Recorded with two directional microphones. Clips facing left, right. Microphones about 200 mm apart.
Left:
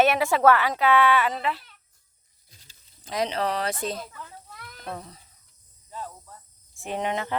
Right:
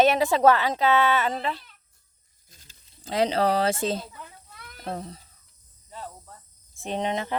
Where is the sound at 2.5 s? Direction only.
45° right (ahead or behind).